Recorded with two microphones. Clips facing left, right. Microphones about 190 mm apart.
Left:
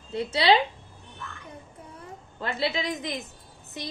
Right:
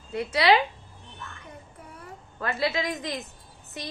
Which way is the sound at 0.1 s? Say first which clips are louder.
Even; 25° left (ahead or behind).